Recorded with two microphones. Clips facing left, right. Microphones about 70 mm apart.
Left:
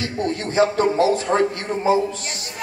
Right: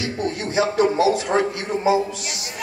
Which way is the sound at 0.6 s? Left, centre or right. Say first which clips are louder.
Left 1 dB; left.